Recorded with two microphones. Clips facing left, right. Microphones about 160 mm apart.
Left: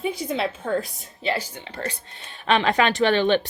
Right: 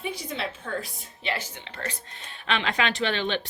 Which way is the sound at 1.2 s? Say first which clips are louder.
Left 6 dB; 35° left (ahead or behind).